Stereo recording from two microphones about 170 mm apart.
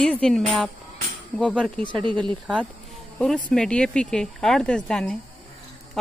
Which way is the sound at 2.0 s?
30° right (ahead or behind).